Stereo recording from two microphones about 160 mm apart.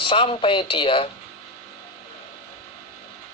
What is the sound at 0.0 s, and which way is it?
A man's voice, 30° left (ahead or behind).